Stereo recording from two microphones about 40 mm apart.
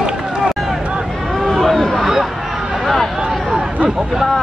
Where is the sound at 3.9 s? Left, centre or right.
Centre.